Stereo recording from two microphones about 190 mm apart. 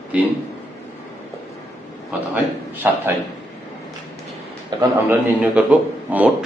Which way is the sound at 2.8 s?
10° right (ahead or behind).